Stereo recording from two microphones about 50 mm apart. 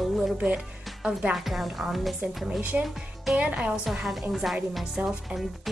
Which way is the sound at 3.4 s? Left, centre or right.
Right.